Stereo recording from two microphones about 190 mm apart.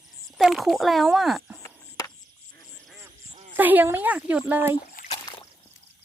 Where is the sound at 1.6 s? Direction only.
15° left (ahead or behind).